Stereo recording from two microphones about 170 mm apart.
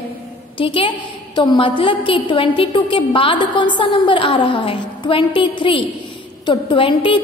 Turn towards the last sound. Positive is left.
turn(degrees=30)  # may be behind; listen again after turning